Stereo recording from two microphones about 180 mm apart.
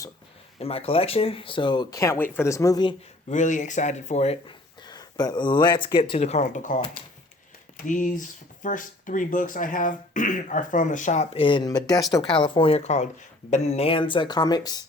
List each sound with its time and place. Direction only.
0.6 s speech: 35° left (ahead or behind)
3.2 s speech: 45° left (ahead or behind)
4.8 s speech: 25° left (ahead or behind); by 6.7 s 45° left (ahead or behind)
7.8 s speech: 45° left (ahead or behind); by 14.8 s 20° left (ahead or behind)